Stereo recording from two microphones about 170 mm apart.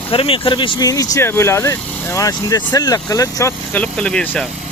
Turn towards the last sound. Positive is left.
turn(degrees=5)  # may be behind; listen again after turning